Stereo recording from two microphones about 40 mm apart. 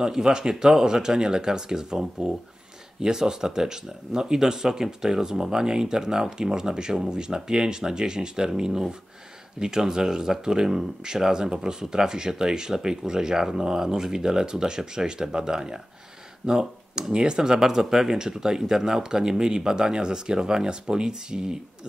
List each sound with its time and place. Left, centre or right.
0.0 s speech: centre